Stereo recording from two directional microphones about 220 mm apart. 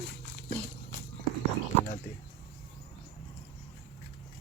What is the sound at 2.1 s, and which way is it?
Speech, 50° left (ahead or behind).